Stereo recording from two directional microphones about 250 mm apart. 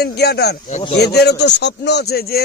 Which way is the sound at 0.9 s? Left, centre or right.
Left.